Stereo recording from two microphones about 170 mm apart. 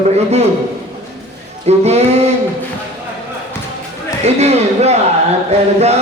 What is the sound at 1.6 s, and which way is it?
Music, 40° right (ahead or behind).